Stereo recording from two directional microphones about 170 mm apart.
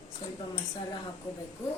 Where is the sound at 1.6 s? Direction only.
15° left (ahead or behind).